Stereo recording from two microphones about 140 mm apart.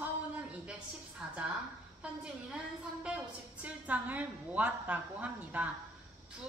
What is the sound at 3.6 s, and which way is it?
A woman's voice, 10° right (ahead or behind).